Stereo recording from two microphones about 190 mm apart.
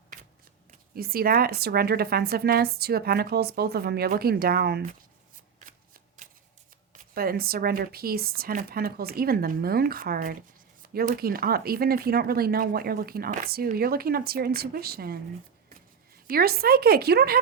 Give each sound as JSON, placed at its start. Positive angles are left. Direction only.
{"t": 0.9, "sound": "a woman's voice", "side_deg": -50}
{"t": 6.9, "sound": "speech", "side_deg": -50}
{"t": 16.2, "sound": "speech", "side_deg": -50}